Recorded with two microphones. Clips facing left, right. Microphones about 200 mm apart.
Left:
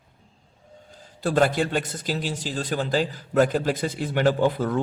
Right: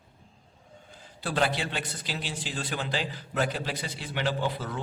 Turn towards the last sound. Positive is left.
turn(degrees=50)  # may be behind; listen again after turning